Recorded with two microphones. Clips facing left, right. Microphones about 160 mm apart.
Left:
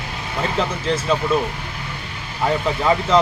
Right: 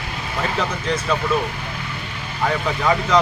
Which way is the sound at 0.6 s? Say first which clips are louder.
Left 4 dB; 30° left (ahead or behind).